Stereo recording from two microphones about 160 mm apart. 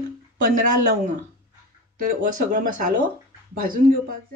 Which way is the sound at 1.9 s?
60° right (ahead or behind).